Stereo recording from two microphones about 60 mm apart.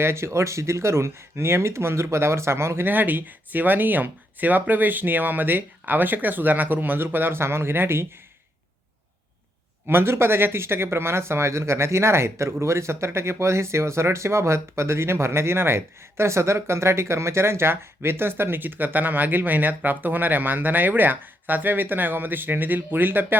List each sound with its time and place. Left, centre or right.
0.0 s speech: right
2.8 s speech: right
9.8 s speech: right